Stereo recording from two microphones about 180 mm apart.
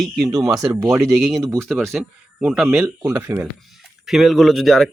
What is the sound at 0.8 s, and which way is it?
Speech, 15° right (ahead or behind).